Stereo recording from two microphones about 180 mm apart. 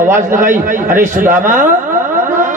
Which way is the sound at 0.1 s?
45° right (ahead or behind).